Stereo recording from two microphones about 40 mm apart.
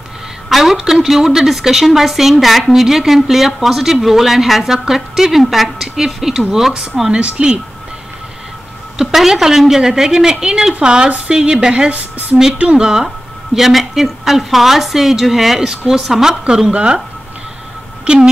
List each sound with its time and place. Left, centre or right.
0.5 s a sound: centre
0.7 s a woman's voice: centre
8.9 s a woman's voice: centre
11.9 s a woman's voice: right
12.7 s a woman's voice: centre
18.0 s speech: right